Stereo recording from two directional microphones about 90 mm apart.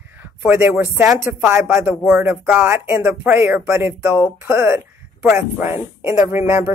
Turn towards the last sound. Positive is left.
turn(degrees=-30)  # may be behind; listen again after turning